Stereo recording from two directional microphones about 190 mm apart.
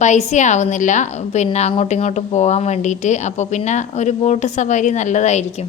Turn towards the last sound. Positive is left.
turn(degrees=40)  # may be behind; listen again after turning